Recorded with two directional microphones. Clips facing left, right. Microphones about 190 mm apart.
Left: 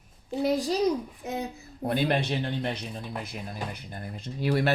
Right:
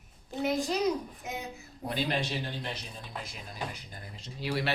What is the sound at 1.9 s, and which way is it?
Speech, 55° left (ahead or behind).